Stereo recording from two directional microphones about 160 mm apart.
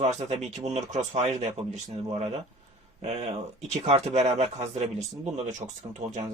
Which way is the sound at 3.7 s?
40° right (ahead or behind).